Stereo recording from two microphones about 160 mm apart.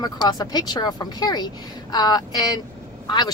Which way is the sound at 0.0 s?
25° left (ahead or behind).